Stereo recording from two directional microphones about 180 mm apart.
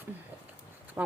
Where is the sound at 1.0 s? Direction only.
10° right (ahead or behind).